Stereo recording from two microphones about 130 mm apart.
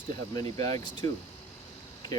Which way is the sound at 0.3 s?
30° left (ahead or behind).